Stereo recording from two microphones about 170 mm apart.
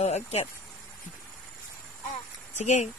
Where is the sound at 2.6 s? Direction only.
45° left (ahead or behind).